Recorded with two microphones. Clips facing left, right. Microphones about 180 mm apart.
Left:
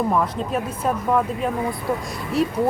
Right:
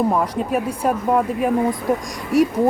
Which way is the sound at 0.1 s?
10° right (ahead or behind).